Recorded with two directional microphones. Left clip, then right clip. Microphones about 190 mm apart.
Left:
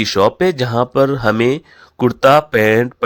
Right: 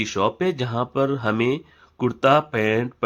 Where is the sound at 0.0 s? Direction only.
35° left (ahead or behind).